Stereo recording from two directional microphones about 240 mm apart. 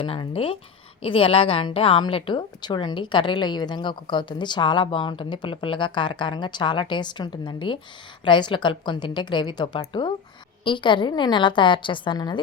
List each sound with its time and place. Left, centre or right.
0.0 s a woman's voice: left